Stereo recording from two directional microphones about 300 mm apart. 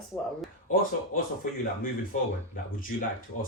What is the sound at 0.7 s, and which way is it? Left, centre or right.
A man's voice, left.